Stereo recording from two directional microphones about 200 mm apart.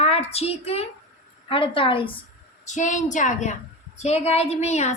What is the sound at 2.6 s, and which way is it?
A woman's voice, 35° left (ahead or behind).